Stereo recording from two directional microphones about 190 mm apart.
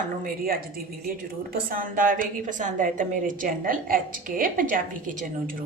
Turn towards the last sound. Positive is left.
turn(degrees=-45)  # may be behind; listen again after turning